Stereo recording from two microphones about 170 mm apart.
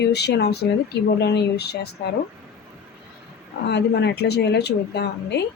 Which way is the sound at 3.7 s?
80° left.